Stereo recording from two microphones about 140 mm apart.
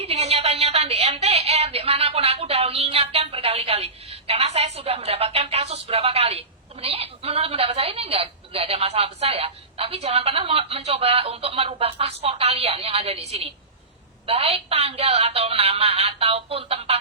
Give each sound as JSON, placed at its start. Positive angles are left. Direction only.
{"t": 0.0, "sound": "a woman's voice", "side_deg": -50}